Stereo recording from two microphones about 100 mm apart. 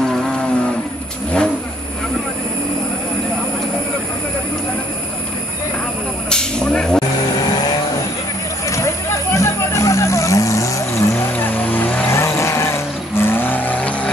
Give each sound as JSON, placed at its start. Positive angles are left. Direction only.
{"t": 0.0, "sound": "livestock", "side_deg": 5}
{"t": 6.3, "sound": "a sound", "side_deg": 5}
{"t": 8.6, "sound": "vehicle", "side_deg": 30}
{"t": 12.1, "sound": "vehicle", "side_deg": 30}